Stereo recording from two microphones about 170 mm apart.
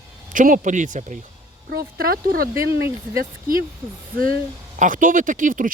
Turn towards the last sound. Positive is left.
turn(degrees=-50)  # may be behind; listen again after turning